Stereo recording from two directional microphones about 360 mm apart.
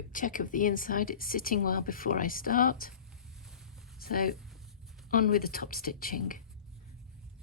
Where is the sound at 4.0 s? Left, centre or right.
Left.